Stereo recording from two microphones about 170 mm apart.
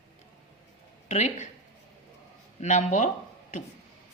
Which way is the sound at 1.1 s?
45° left (ahead or behind).